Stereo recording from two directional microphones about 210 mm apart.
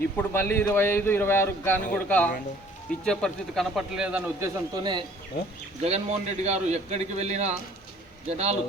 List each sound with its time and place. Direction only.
0.2 s a man's voice: 10° left (ahead or behind); by 5.0 s 20° right (ahead or behind)
5.8 s a man's voice: 30° right (ahead or behind)